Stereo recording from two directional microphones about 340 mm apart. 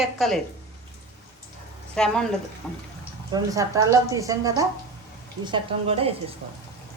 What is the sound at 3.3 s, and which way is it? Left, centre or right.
A woman's voice, centre.